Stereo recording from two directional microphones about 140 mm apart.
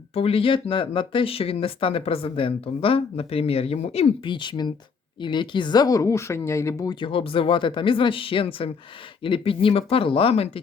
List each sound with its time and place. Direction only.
0.1 s speech: 45° left (ahead or behind); by 6.9 s 20° left (ahead or behind)
7.0 s speech: 40° left (ahead or behind)